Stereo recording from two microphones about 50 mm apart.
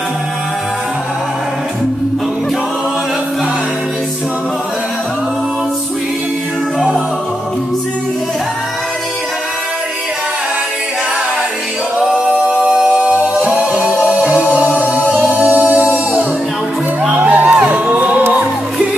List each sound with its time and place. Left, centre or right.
12.6 s music: right
17.2 s music: right